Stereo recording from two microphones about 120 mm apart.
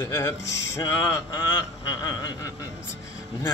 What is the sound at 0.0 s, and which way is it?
Speech, 30° left (ahead or behind).